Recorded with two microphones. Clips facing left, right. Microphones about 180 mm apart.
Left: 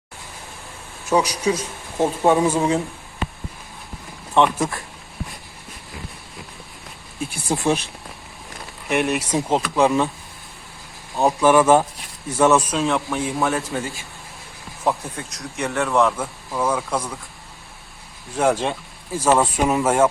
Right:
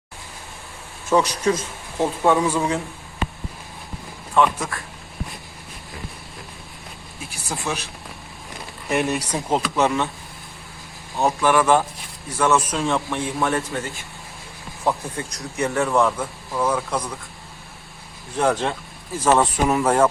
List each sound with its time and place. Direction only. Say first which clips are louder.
1.1 s speech: even; 10° left (ahead or behind)
2.0 s speech: left 2 dB; 20° left (ahead or behind)
4.4 s speech: left 2 dB; 25° left (ahead or behind)
7.5 s speech: left 7 dB; 25° left (ahead or behind)
8.9 s speech: left 1 dB; centre (ahead or behind)
11.2 s speech: left 3 dB; 15° left (ahead or behind)
12.7 s speech: left 1 dB; 5° left (ahead or behind)
18.3 s speech: left 1 dB; 10° left (ahead or behind)